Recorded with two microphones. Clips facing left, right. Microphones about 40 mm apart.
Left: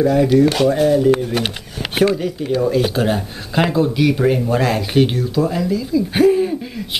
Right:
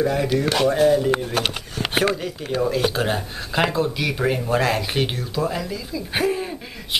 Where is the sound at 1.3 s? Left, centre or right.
Centre.